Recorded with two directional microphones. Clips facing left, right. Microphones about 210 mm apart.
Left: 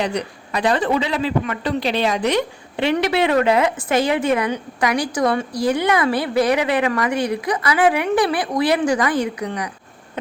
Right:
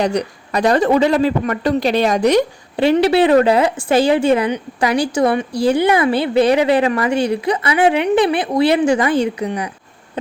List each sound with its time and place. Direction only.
0.0 s a man's voice: 40° right (ahead or behind); by 9.5 s 25° right (ahead or behind)